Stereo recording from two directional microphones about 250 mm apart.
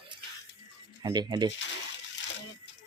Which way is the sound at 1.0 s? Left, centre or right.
Centre.